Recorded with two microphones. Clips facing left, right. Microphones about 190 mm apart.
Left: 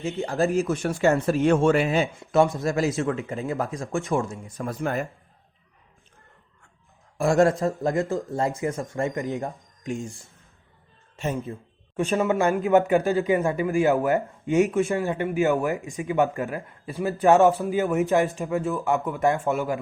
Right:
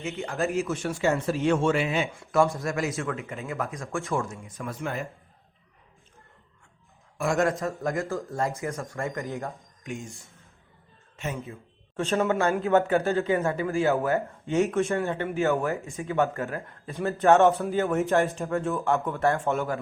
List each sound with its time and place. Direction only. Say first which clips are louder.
0.0 s speech: left 5 dB; 35° left (ahead or behind)
2.1 s speech: left 3 dB; 20° left (ahead or behind)
4.4 s speech: left 5 dB; 35° left (ahead or behind)
7.2 s speech: left 5 dB; 35° left (ahead or behind)
9.8 s speech: left 6 dB; 35° left (ahead or behind)
11.2 s speech: left 5 dB; 35° left (ahead or behind)
11.9 s a man's voice: left 2 dB; 15° left (ahead or behind)
18.9 s a man's voice: left 2 dB; 15° left (ahead or behind)